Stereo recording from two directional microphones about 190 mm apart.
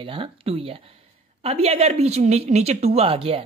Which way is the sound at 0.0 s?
30° right (ahead or behind).